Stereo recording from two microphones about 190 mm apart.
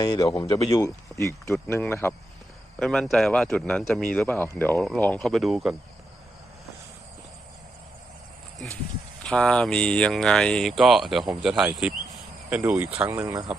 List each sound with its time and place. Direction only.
0.0 s speech: 20° left (ahead or behind); by 5.7 s centre (ahead or behind)
8.5 s a sound: centre (ahead or behind)
9.2 s speech: 5° left (ahead or behind); by 13.4 s 15° right (ahead or behind)